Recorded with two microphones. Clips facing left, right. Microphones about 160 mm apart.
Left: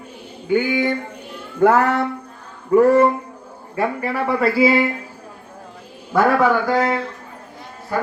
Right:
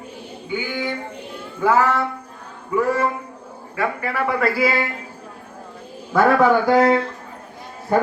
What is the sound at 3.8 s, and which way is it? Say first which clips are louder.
Speech: left 2 dB; 30° left (ahead or behind).